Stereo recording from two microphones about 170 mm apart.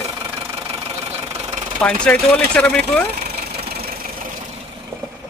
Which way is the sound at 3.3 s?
70° right (ahead or behind).